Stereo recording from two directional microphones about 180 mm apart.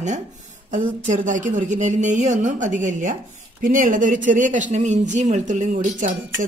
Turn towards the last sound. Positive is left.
turn(degrees=-45)  # may be behind; listen again after turning